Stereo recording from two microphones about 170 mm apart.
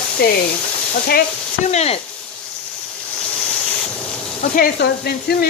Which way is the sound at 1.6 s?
40° left (ahead or behind).